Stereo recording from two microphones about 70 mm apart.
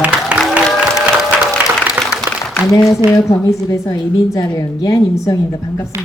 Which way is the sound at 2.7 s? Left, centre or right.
Left.